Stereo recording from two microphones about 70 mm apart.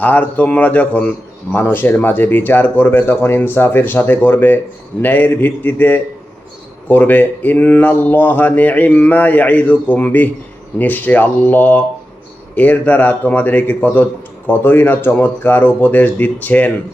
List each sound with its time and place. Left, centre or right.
0.0 s speech: left